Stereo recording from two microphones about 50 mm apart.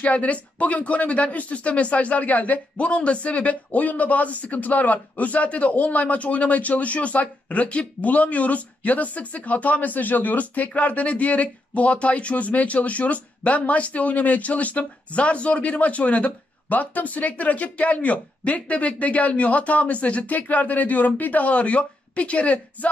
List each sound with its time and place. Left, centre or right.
0.0 s speech: left